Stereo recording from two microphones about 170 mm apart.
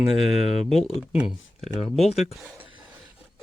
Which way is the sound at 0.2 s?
40° left (ahead or behind).